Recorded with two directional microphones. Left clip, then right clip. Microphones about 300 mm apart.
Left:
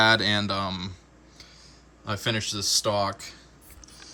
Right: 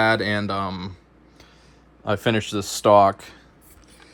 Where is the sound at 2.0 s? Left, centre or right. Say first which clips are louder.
Right 6 dB; centre.